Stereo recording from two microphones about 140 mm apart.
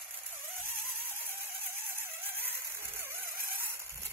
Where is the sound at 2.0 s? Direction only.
15° right (ahead or behind).